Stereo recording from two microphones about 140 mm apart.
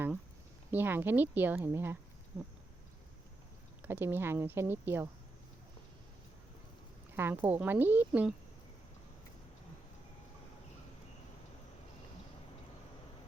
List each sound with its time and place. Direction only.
0.7 s a woman's voice: 15° right (ahead or behind)
3.8 s a woman's voice: 15° right (ahead or behind)
7.2 s a woman's voice: 15° right (ahead or behind)